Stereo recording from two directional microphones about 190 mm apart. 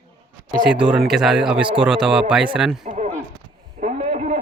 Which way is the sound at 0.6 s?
5° right (ahead or behind).